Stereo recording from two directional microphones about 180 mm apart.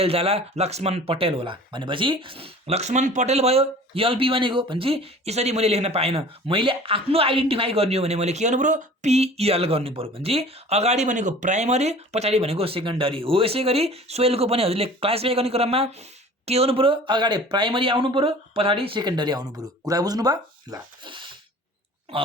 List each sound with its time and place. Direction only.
0.0 s speech: 35° right (ahead or behind)